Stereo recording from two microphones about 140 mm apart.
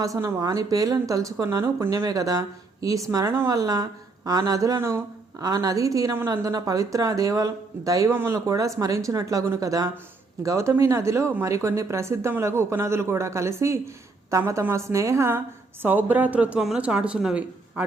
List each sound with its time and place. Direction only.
0.0 s a woman's voice: 20° right (ahead or behind)